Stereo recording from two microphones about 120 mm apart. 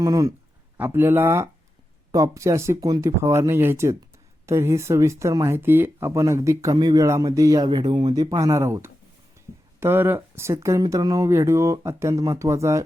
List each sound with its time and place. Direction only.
0.0 s speech: 30° right (ahead or behind)